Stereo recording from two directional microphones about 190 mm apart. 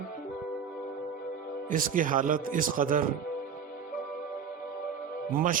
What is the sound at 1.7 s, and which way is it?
A man's voice, 45° right (ahead or behind).